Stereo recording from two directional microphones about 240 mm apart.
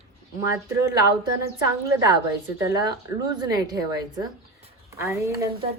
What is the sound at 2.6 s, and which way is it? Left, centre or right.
A woman's voice, centre.